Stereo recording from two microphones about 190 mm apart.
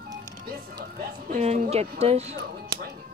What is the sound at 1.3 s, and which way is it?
Speech, 40° right (ahead or behind).